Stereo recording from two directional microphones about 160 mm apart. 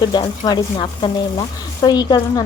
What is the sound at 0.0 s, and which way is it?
Speech, 25° left (ahead or behind).